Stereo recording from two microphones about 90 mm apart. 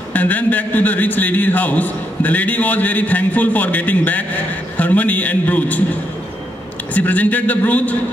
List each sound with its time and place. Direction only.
0.1 s a man's voice: 20° left (ahead or behind)
6.9 s a man's voice: 20° left (ahead or behind)